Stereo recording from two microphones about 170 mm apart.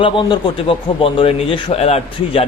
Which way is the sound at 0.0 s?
30° left (ahead or behind).